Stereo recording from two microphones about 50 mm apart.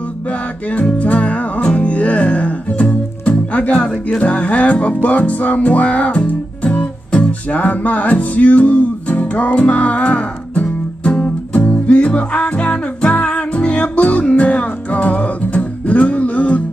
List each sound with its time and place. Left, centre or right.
0.3 s music: left